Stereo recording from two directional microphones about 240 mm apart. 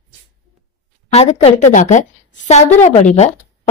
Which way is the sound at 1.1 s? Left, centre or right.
Left.